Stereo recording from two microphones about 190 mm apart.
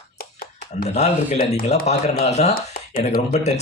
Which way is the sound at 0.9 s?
35° left (ahead or behind).